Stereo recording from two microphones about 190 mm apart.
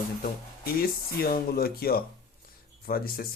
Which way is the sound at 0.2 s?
50° left (ahead or behind).